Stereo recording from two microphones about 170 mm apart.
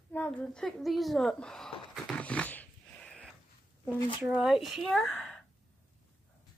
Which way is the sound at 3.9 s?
30° left (ahead or behind).